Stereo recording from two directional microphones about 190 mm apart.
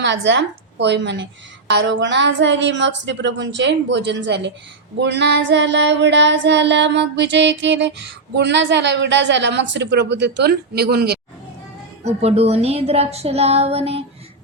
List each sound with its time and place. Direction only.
0.0 s a woman's voice: 70° right (ahead or behind)
1.7 s child singing: 70° right (ahead or behind)
12.0 s speech: 35° right (ahead or behind)